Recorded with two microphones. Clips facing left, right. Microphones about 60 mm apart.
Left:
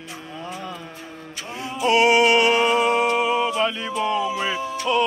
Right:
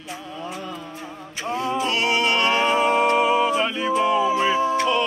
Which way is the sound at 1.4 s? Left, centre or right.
Right.